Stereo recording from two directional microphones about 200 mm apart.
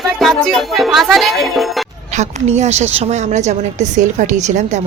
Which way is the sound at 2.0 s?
35° right (ahead or behind).